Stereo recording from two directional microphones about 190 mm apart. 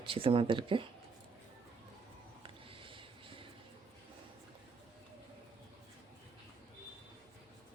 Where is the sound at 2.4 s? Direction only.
30° right (ahead or behind).